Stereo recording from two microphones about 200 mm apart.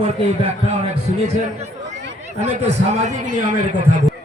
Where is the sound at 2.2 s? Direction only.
35° right (ahead or behind).